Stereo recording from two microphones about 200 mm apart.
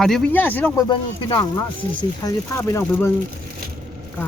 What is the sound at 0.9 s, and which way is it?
Speech, 25° left (ahead or behind).